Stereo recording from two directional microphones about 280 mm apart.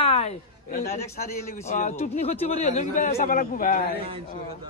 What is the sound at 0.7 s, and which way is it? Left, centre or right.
Speech, left.